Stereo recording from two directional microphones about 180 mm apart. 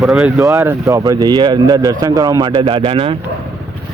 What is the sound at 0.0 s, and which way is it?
Speech, centre (ahead or behind).